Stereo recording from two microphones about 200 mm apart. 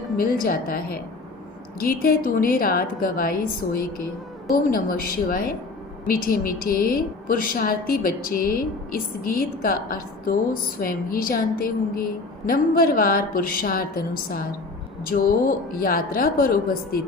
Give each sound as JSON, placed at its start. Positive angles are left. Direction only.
{"t": 0.2, "sound": "a woman's voice", "side_deg": 45}